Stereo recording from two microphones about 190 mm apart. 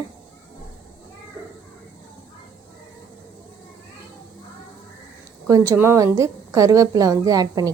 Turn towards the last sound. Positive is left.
turn(degrees=-20)  # may be behind; listen again after turning